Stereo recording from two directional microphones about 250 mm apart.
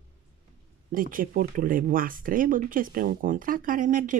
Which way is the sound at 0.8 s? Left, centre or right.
Right.